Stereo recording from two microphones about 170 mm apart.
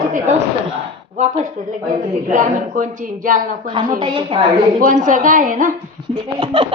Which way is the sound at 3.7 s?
25° right (ahead or behind).